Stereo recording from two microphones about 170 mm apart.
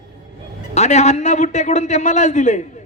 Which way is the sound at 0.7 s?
40° left (ahead or behind).